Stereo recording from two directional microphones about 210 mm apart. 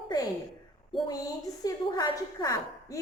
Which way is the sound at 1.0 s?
15° left (ahead or behind).